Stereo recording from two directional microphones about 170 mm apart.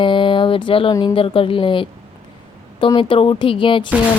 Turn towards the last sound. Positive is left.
turn(degrees=30)  # may be behind; listen again after turning